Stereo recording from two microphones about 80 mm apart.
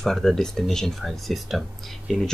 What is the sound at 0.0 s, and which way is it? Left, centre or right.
Speech, centre.